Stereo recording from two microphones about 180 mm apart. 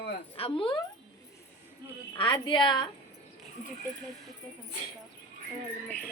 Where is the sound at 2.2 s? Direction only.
30° left (ahead or behind).